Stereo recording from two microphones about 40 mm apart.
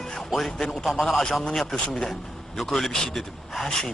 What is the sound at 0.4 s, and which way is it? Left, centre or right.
Speech, centre.